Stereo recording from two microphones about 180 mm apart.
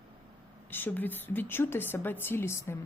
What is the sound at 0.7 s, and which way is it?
A woman's voice, 10° left (ahead or behind).